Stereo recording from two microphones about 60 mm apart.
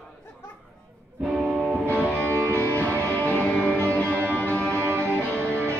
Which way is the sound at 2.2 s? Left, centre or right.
Left.